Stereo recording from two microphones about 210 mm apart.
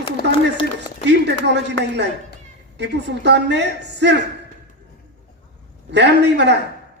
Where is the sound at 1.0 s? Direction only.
55° right (ahead or behind).